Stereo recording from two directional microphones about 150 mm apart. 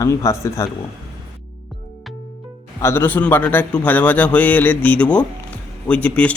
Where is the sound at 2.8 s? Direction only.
15° left (ahead or behind).